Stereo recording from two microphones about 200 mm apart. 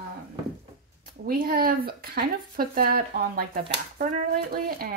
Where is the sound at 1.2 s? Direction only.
45° right (ahead or behind).